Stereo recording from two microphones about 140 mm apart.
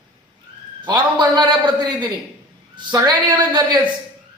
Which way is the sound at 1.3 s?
35° right (ahead or behind).